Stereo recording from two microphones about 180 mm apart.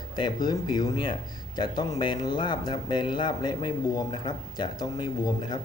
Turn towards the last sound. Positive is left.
turn(degrees=20)  # may be behind; listen again after turning